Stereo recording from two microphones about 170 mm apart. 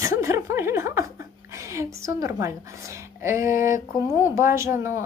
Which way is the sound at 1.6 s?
15° right (ahead or behind).